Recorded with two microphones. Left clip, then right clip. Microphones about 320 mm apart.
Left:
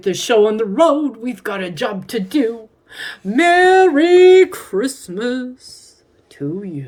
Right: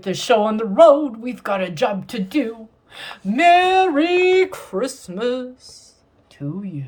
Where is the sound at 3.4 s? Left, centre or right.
Right.